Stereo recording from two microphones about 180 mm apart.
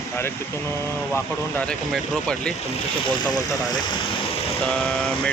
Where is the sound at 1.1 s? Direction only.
5° left (ahead or behind).